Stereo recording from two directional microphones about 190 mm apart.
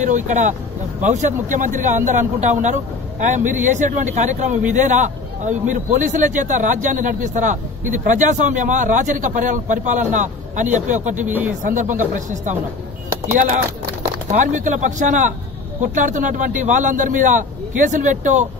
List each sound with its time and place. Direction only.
0.0 s a man's voice: 40° right (ahead or behind)
11.2 s speech: 10° right (ahead or behind)
11.6 s speech: 40° right (ahead or behind)
13.3 s a man's voice: 40° right (ahead or behind)